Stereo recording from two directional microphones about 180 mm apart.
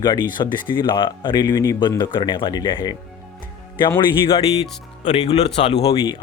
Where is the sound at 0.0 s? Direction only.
25° left (ahead or behind).